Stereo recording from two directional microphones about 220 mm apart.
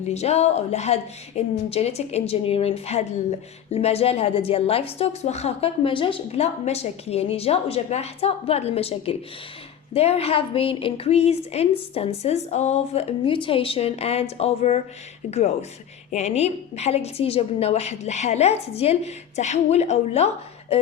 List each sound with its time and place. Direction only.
0.0 s a woman's voice: 30° left (ahead or behind)